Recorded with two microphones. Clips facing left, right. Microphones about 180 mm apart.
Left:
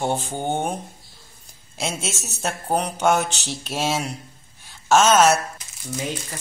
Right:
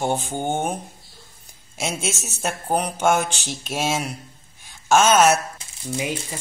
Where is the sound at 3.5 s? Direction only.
10° right (ahead or behind).